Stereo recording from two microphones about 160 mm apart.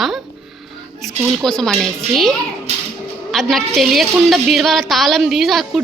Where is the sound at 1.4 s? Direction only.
5° left (ahead or behind).